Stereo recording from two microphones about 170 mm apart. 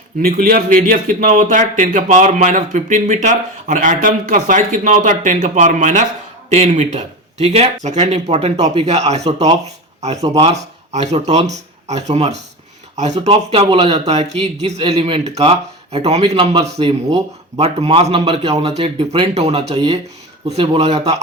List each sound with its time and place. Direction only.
0.2 s a man's voice: 60° right (ahead or behind); by 10.2 s 40° right (ahead or behind)
10.2 s speech: 25° right (ahead or behind)
10.5 s a man's voice: 40° right (ahead or behind)